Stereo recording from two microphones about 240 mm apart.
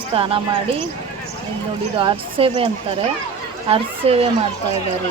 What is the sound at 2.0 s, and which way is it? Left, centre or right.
Speech, right.